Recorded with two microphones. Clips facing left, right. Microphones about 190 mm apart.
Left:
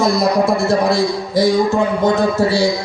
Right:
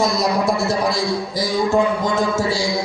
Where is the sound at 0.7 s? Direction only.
65° left (ahead or behind).